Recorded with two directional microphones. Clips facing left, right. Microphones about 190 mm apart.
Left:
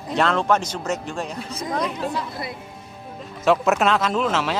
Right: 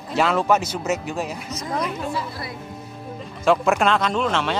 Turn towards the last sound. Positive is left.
turn(degrees=5)  # may be behind; listen again after turning